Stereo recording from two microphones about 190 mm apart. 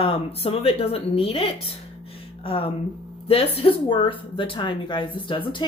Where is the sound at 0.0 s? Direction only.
30° left (ahead or behind).